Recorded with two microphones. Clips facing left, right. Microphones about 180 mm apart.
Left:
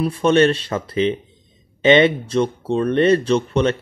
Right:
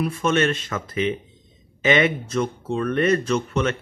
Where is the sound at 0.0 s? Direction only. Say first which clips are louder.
Left 6 dB; 30° left (ahead or behind).